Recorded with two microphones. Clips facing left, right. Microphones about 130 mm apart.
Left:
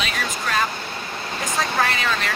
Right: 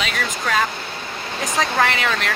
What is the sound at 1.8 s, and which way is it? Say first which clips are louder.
Speech: right 2 dB; 90° right.